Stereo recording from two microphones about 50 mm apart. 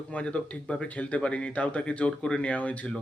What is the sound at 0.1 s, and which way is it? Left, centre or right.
Speech, left.